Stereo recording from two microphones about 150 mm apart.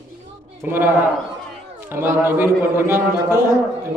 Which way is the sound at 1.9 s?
15° right (ahead or behind).